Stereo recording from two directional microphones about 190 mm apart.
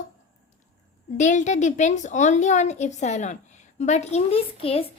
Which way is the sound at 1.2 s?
40° left (ahead or behind).